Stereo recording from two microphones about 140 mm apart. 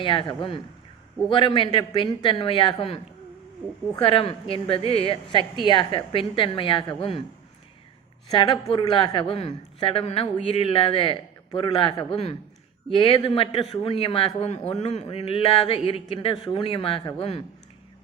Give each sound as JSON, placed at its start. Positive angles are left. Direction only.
{"t": 0.0, "sound": "a woman's voice", "side_deg": 35}
{"t": 4.0, "sound": "a woman's voice", "side_deg": 40}
{"t": 8.4, "sound": "a woman's voice", "side_deg": 40}